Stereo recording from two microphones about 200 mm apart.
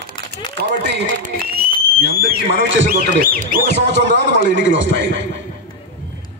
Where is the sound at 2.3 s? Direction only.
45° right (ahead or behind).